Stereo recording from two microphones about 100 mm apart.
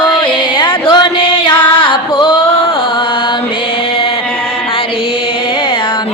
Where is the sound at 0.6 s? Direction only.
55° left (ahead or behind).